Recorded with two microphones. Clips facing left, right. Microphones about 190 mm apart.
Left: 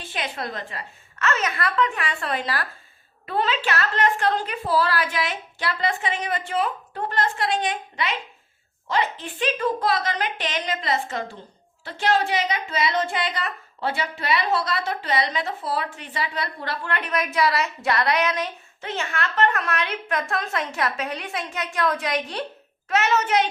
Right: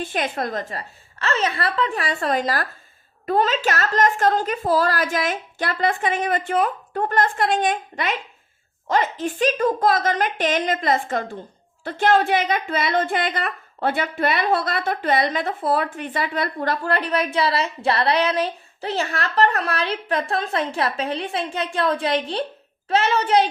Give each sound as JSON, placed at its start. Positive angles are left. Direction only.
{"t": 0.0, "sound": "a woman's voice", "side_deg": -50}